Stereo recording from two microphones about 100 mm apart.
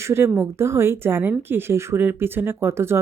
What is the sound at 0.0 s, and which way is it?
Speech, 25° right (ahead or behind).